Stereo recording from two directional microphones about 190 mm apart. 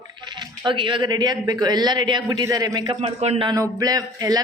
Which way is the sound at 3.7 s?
20° right (ahead or behind).